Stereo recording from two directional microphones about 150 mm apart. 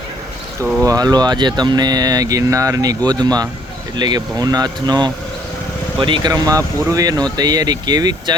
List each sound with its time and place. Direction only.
0.6 s speech: 20° right (ahead or behind)